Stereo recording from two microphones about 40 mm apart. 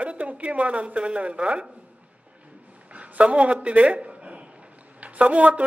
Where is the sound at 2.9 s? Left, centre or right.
Right.